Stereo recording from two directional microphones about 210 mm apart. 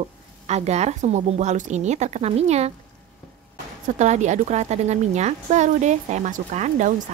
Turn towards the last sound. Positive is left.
turn(degrees=-35)  # may be behind; listen again after turning